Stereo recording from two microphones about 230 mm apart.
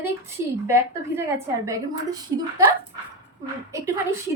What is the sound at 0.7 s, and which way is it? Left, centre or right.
A woman's voice, centre.